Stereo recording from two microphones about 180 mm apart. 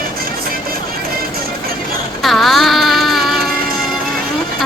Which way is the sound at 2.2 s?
Centre (ahead or behind).